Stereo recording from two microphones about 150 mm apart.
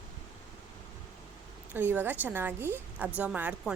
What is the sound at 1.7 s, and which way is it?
A woman's voice, 15° right (ahead or behind).